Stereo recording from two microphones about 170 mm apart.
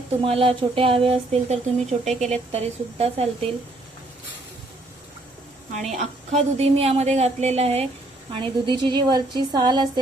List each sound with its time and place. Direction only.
0.3 s a woman's voice: 35° right (ahead or behind)
5.7 s a woman's voice: 40° right (ahead or behind); by 10.0 s 25° right (ahead or behind)